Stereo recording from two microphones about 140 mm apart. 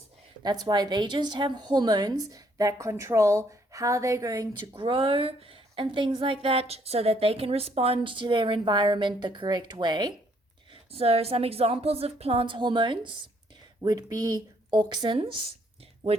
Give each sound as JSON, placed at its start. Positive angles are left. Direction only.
{"t": 0.4, "sound": "a woman's voice", "side_deg": -30}
{"t": 4.7, "sound": "a woman's voice", "side_deg": -40}
{"t": 10.9, "sound": "a woman's voice", "side_deg": -45}